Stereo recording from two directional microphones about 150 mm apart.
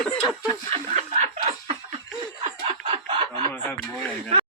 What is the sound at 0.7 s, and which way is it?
Snicker, 50° right (ahead or behind).